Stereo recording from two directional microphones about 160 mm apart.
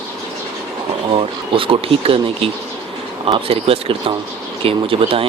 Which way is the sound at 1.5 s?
35° right (ahead or behind).